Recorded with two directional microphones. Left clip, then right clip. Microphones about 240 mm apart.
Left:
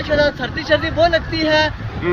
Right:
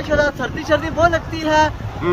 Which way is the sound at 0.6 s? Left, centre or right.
Centre.